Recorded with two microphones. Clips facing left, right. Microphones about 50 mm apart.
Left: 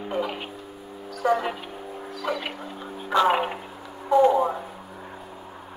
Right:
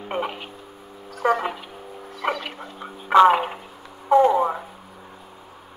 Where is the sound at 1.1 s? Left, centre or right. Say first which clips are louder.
Right 2 dB; right.